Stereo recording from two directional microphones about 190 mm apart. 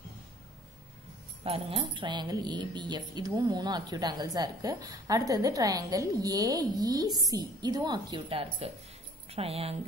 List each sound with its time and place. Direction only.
1.4 s speech: 30° right (ahead or behind)